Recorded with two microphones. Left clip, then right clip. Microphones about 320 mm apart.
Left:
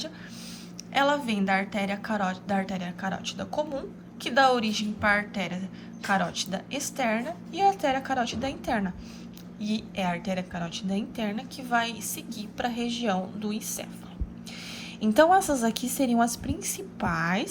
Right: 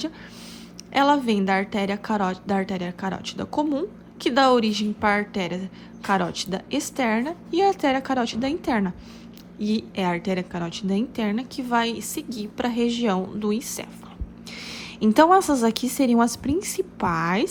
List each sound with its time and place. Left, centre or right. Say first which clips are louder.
0.9 s a woman's voice: right 5 dB; centre